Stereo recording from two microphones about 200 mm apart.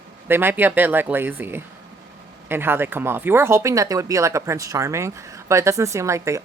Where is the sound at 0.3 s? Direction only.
10° right (ahead or behind).